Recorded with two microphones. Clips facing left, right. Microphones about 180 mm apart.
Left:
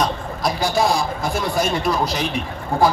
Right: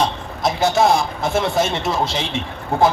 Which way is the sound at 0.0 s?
25° right (ahead or behind).